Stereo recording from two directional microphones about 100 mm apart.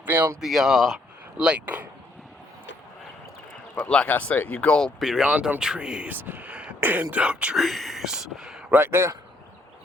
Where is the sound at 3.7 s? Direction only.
10° left (ahead or behind).